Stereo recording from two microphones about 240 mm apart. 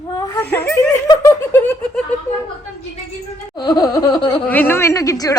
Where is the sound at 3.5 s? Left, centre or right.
Centre.